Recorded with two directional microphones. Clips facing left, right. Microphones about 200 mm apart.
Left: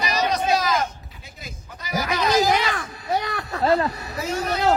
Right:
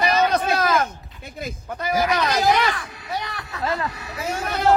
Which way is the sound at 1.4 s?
55° right (ahead or behind).